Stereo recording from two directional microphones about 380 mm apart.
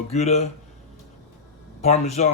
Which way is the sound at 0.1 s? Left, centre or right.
Centre.